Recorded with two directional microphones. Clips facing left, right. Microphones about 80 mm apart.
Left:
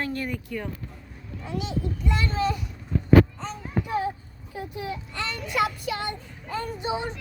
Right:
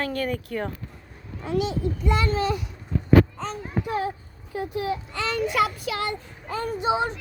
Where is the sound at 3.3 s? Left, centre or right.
Right.